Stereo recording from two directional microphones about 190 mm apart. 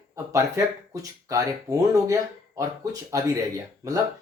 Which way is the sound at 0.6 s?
15° right (ahead or behind).